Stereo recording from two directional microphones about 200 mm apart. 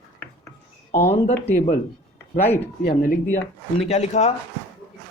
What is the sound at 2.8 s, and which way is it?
Speech, 45° left (ahead or behind).